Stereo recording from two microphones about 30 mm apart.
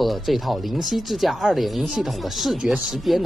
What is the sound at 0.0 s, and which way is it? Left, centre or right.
Speech, centre.